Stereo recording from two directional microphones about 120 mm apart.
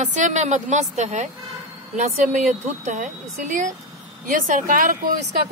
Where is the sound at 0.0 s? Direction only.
80° right.